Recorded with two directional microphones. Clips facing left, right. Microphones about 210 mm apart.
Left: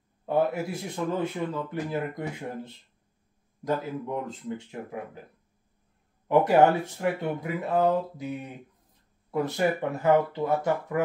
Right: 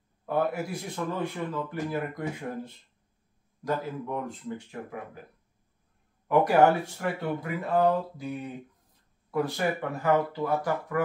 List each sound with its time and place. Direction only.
0.2 s speech: 25° left (ahead or behind)
6.2 s speech: 25° left (ahead or behind)